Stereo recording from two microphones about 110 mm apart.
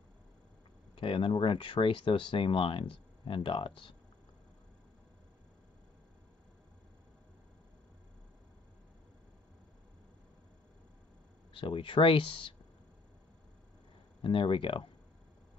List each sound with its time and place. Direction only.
0.9 s speech: 55° left (ahead or behind)
11.5 s speech: 50° left (ahead or behind)
14.2 s speech: 50° left (ahead or behind)